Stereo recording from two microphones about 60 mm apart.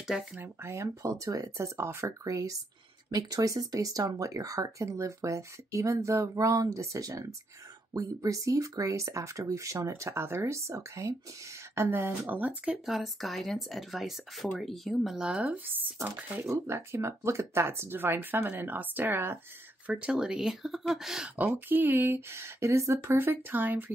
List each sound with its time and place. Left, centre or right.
0.0 s speech: centre
0.4 s speech: right
2.2 s speech: right
3.1 s speech: right
4.8 s speech: right
11.7 s speech: right
12.3 s speech: right
12.8 s speech: centre
15.2 s speech: right
16.4 s speech: right
19.9 s speech: centre
20.2 s speech: centre
21.4 s speech: right
23.0 s speech: right